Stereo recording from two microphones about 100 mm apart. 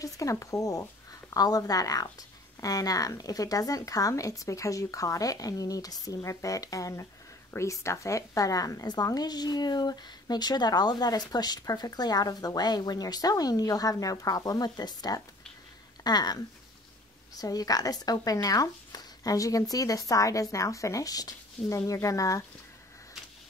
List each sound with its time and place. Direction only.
0.0 s a woman's voice: 35° left (ahead or behind)
17.4 s a woman's voice: 40° left (ahead or behind)